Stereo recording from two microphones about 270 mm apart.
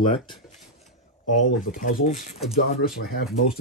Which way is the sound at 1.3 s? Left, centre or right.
Left.